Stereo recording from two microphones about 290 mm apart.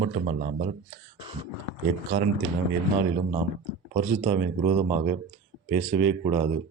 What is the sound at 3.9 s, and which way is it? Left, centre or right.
Speech, right.